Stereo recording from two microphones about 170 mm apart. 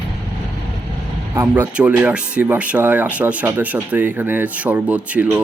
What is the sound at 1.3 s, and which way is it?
Speech, 10° right (ahead or behind).